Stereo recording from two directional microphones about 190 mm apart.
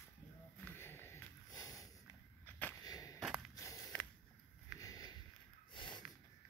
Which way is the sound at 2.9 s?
20° left (ahead or behind).